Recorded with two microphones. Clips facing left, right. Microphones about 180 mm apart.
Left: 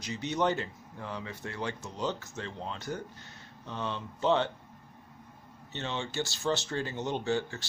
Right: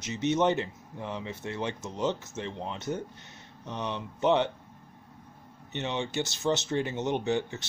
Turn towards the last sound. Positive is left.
turn(degrees=-20)  # may be behind; listen again after turning